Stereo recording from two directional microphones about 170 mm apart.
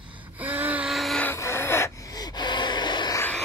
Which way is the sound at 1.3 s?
15° left (ahead or behind).